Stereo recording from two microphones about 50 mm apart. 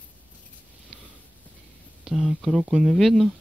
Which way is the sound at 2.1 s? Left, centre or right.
Centre.